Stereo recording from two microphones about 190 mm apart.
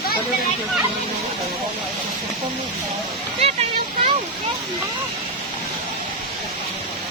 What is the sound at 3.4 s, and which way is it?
Speech, 30° right (ahead or behind).